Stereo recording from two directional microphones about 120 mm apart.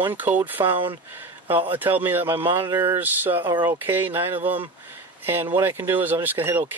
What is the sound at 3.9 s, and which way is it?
Speech, 15° right (ahead or behind).